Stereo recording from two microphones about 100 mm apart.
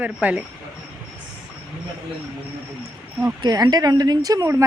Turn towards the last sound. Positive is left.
turn(degrees=-30)  # may be behind; listen again after turning